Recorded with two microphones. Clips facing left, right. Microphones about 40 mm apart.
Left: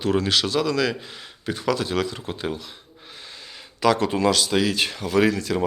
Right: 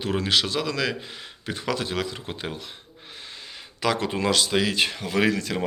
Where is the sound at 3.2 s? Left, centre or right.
Right.